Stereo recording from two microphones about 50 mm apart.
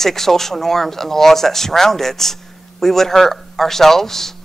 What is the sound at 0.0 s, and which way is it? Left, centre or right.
Speech, centre.